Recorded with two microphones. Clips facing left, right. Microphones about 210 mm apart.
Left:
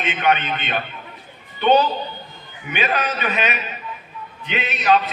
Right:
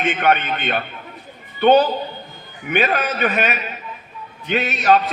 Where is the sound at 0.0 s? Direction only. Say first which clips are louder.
Right 2 dB; 50° right (ahead or behind).